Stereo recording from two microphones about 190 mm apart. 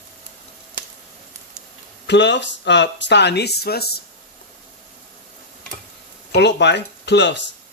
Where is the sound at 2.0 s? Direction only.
70° left (ahead or behind).